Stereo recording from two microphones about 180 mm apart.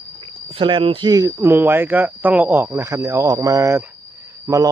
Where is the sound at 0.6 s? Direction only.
30° right (ahead or behind).